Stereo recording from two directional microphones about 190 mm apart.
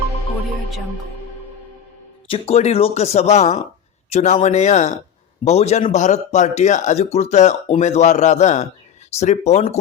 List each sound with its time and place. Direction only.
2.3 s a man's voice: 35° left (ahead or behind)